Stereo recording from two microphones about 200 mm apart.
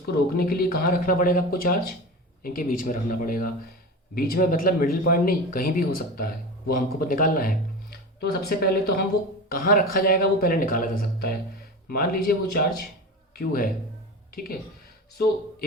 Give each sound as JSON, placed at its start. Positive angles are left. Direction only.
{"t": 0.3, "sound": "a man's voice", "side_deg": 50}